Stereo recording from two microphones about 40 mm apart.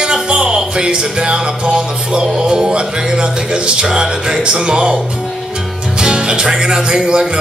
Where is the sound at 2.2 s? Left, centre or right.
Centre.